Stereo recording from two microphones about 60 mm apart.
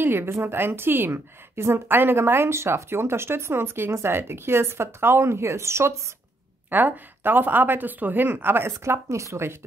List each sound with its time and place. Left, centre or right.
0.0 s a woman's voice: right
6.7 s speech: right